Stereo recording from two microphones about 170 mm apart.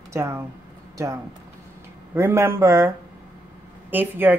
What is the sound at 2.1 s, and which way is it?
Speech, 15° right (ahead or behind).